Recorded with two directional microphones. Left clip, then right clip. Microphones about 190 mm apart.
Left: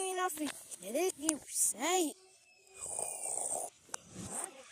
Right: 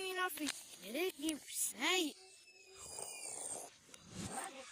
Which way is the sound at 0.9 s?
20° right (ahead or behind).